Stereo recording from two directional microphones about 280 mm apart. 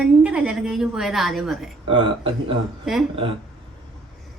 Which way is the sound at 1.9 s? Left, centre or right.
Centre.